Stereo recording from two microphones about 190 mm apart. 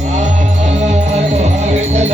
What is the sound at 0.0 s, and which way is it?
Music, 40° right (ahead or behind).